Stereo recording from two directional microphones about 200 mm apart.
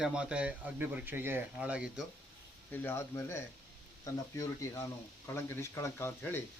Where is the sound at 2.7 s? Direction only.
10° left (ahead or behind).